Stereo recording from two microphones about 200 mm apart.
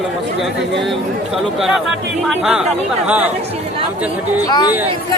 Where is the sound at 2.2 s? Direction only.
Centre (ahead or behind).